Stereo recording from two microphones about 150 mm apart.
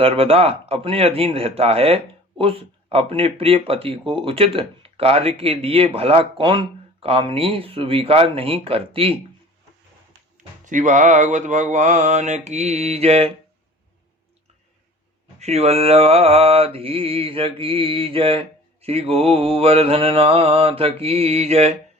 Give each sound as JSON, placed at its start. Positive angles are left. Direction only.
{"t": 0.0, "sound": "mantra", "side_deg": -40}
{"t": 10.3, "sound": "mantra", "side_deg": -60}
{"t": 15.4, "sound": "mantra", "side_deg": -45}